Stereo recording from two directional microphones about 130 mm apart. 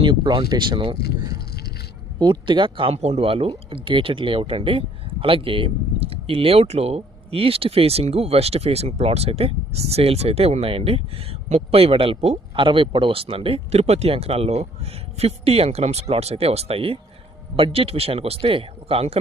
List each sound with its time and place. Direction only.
0.0 s speech: 40° right (ahead or behind)